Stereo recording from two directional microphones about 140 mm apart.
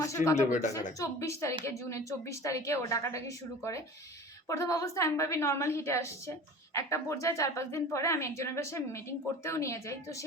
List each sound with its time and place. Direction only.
0.0 s a woman's voice: 20° left (ahead or behind)